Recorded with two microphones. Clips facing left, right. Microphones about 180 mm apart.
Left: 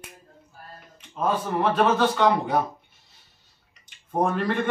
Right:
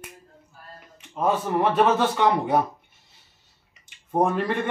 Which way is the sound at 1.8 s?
10° right (ahead or behind).